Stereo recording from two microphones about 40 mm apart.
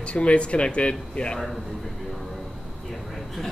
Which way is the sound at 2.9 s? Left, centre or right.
Centre.